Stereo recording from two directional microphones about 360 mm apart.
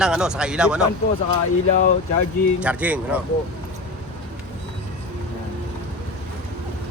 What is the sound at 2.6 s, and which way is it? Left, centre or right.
Speech, centre.